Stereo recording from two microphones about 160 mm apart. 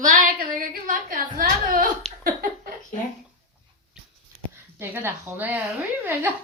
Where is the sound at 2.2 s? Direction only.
65° right (ahead or behind).